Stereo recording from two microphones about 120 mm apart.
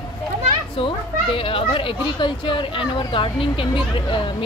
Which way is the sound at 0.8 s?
50° left (ahead or behind).